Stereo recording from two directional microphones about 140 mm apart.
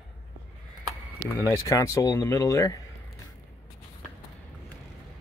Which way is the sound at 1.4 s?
25° left (ahead or behind).